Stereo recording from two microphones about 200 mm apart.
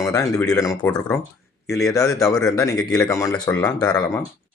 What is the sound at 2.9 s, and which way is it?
Speech, 15° left (ahead or behind).